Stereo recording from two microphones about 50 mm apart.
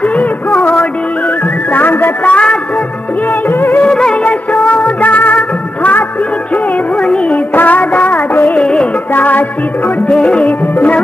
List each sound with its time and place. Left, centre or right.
0.0 s music: left
1.7 s music: left
2.2 s music: left
3.4 s music: left
3.9 s music of bollywood: centre
4.2 s music of bollywood: left
7.0 s music: centre
7.3 s music: left
8.5 s music: left
9.1 s music: left
10.0 s music: left